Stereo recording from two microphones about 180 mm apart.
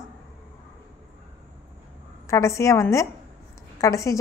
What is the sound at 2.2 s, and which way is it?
A woman's voice, 15° left (ahead or behind).